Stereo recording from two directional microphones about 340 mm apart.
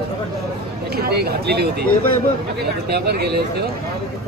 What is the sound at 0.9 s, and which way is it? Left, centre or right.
Speech, right.